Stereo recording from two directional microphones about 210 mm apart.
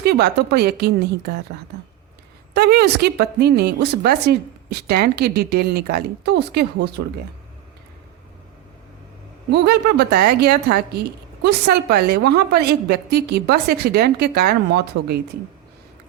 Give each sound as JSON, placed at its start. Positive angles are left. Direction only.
{"t": 0.0, "sound": "a woman's voice", "side_deg": -50}
{"t": 2.5, "sound": "a woman's voice", "side_deg": -50}
{"t": 9.5, "sound": "a woman's voice", "side_deg": -50}